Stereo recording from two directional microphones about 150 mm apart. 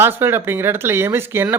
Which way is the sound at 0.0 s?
15° right (ahead or behind).